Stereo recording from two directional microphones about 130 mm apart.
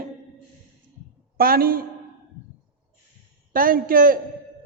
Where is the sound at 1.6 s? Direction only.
90° right.